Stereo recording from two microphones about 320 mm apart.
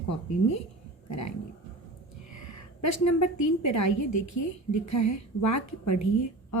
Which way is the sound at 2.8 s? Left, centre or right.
Left.